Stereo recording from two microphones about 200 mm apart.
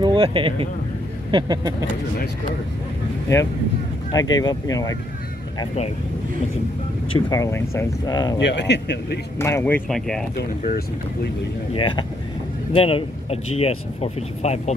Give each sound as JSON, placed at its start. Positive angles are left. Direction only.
{"t": 0.0, "sound": "speech", "side_deg": -25}
{"t": 3.3, "sound": "speech", "side_deg": 15}
{"t": 7.2, "sound": "speech", "side_deg": 15}
{"t": 8.4, "sound": "speech", "side_deg": 60}
{"t": 9.4, "sound": "speech", "side_deg": 15}
{"t": 9.8, "sound": "speech", "side_deg": 0}
{"t": 11.7, "sound": "speech", "side_deg": 25}